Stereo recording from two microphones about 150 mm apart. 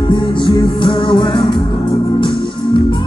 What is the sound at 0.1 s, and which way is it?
Music, 30° left (ahead or behind).